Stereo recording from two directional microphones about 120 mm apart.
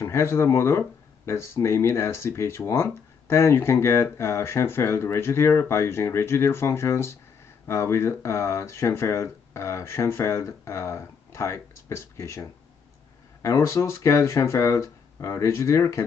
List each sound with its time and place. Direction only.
0.0 s speech: 20° left (ahead or behind)